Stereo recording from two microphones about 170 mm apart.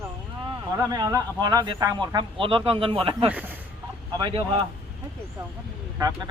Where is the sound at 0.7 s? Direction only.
20° right (ahead or behind).